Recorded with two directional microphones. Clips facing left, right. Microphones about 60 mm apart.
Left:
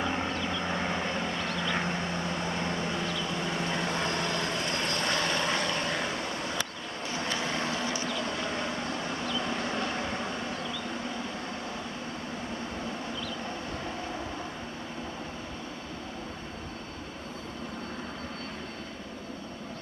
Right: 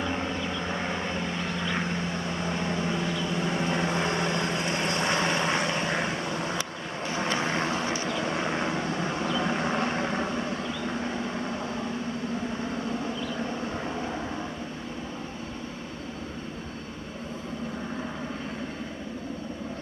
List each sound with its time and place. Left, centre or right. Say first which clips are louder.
0.0 s vehicle: right 1 dB; centre; by 6.1 s right
7.2 s vehicle: right 4 dB; right